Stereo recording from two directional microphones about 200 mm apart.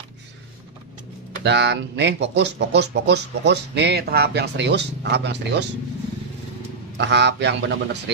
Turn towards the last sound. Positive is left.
turn(degrees=-60)  # may be behind; listen again after turning